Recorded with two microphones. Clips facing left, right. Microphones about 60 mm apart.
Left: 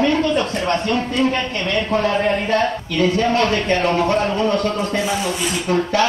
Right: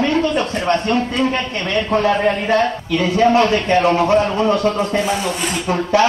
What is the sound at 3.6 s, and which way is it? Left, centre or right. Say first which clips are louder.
Speech: right 3 dB; centre.